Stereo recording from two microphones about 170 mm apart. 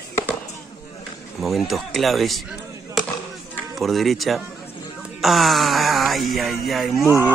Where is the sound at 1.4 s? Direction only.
Centre (ahead or behind).